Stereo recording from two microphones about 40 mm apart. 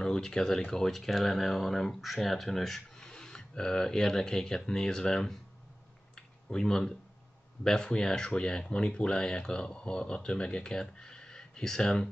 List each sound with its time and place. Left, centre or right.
0.0 s speech: centre
3.0 s speech: centre
6.1 s a sound: centre
7.6 s speech: centre